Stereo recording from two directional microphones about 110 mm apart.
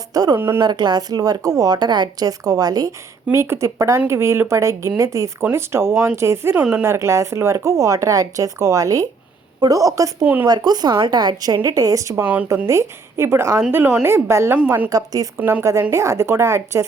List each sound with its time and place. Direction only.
0.1 s a woman's voice: 35° right (ahead or behind)
0.3 s speech: 20° right (ahead or behind)
0.6 s a woman's voice: 40° right (ahead or behind)
3.3 s a woman's voice: 25° right (ahead or behind)
12.2 s speech: 15° right (ahead or behind)
12.6 s a woman's voice: 25° right (ahead or behind)
15.4 s speech: 15° right (ahead or behind)
15.8 s speech: 25° right (ahead or behind)